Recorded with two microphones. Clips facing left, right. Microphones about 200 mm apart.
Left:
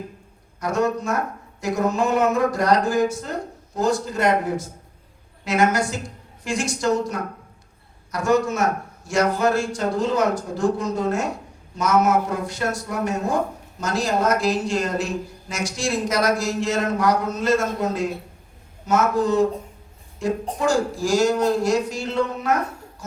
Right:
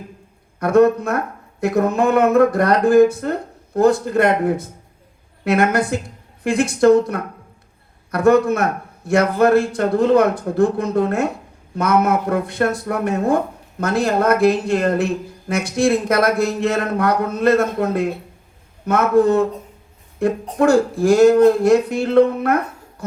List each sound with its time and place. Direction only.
0.6 s speech: 60° right (ahead or behind)